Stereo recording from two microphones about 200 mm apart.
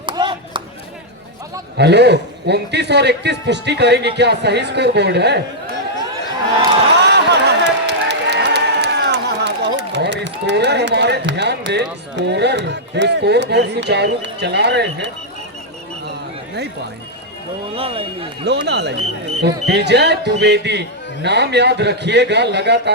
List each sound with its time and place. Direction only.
0.0 s clapping: 25° right (ahead or behind)
1.8 s a man's voice: 55° right (ahead or behind)
7.0 s a sound: 55° right (ahead or behind)
17.7 s speech: 30° right (ahead or behind)
18.4 s a man's voice: 60° right (ahead or behind)